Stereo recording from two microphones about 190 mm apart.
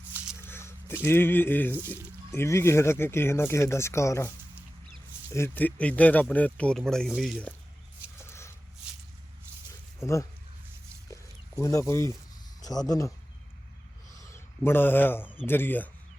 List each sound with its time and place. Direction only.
0.3 s a sound: 15° left (ahead or behind)
1.0 s speech: 10° left (ahead or behind)
5.3 s speech: 10° left (ahead or behind)
8.3 s a sound: 15° left (ahead or behind)
10.0 s speech: 15° left (ahead or behind)
11.1 s chicken: 15° left (ahead or behind)
12.9 s speech: 15° left (ahead or behind)
14.2 s a sound: 10° left (ahead or behind)
15.2 s speech: 5° right (ahead or behind)
15.4 s speech: 10° left (ahead or behind)